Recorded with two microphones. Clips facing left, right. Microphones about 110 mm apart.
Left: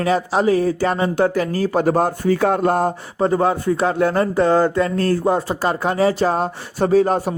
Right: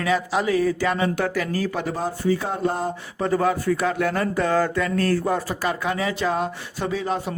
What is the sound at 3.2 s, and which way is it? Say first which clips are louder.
Speech: left 4 dB; 30° left (ahead or behind).